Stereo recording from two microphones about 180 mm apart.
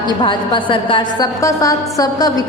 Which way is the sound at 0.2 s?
25° left (ahead or behind).